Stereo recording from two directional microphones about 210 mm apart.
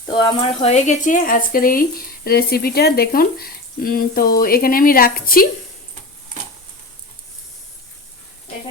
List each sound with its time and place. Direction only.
0.0 s speech: 25° left (ahead or behind); by 5.5 s 45° left (ahead or behind)